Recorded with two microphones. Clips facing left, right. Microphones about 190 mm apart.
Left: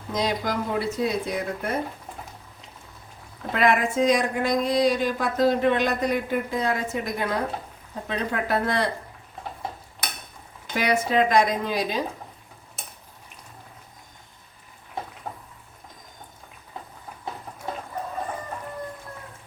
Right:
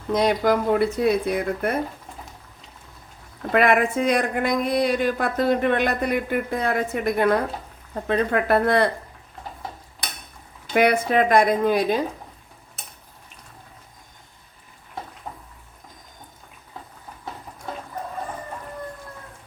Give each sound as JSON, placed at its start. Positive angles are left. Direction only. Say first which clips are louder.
{"t": 0.1, "sound": "speech", "louder": "right 7 dB", "side_deg": -60}
{"t": 3.5, "sound": "speech", "louder": "right 3 dB", "side_deg": -55}
{"t": 10.8, "sound": "speech", "louder": "right 4 dB", "side_deg": -55}